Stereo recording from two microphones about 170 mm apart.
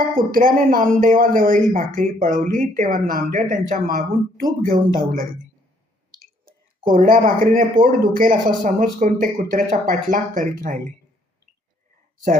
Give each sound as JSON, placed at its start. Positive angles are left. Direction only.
{"t": 0.3, "sound": "speech", "side_deg": -55}
{"t": 6.8, "sound": "speech", "side_deg": -55}